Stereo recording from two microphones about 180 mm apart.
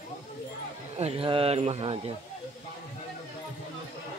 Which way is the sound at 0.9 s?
35° right (ahead or behind).